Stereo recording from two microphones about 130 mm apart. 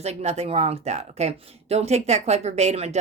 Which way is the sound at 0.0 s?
55° right (ahead or behind).